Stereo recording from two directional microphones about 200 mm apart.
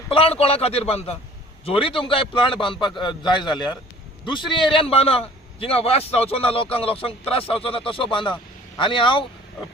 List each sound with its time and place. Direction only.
0.1 s a man's voice: 30° left (ahead or behind)